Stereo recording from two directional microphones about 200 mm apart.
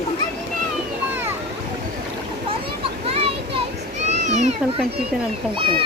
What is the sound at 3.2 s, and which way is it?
Children playing, 30° right (ahead or behind).